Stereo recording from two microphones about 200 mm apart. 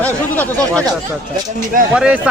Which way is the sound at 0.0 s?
5° left (ahead or behind).